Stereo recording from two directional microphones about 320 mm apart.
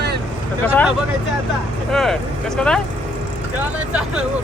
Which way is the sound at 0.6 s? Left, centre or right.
Centre.